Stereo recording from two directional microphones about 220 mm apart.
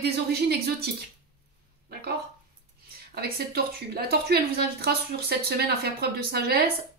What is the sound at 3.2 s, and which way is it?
A woman's voice, 45° right (ahead or behind).